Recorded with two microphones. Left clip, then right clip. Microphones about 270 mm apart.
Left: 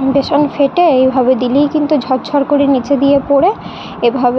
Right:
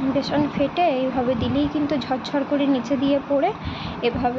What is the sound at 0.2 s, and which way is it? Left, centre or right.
Speech, left.